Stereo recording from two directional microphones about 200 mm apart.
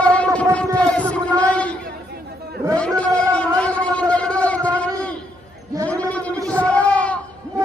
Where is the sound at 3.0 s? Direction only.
5° left (ahead or behind).